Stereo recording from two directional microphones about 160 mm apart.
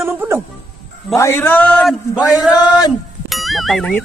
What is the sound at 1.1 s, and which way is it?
Speech, 15° left (ahead or behind).